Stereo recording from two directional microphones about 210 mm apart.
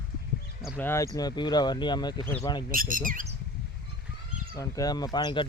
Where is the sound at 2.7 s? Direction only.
40° right (ahead or behind).